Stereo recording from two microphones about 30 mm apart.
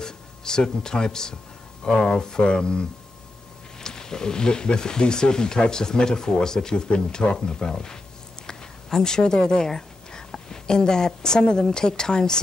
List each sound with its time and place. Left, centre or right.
0.0 s speech: left
3.8 s a woman's voice: left